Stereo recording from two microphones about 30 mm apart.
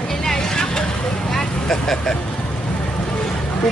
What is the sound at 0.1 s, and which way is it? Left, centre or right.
Vehicle, centre.